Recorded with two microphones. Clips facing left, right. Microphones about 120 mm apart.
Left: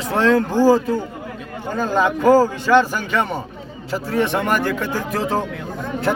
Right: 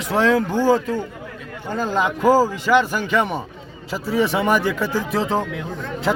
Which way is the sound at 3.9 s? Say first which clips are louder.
Even; 5° right (ahead or behind).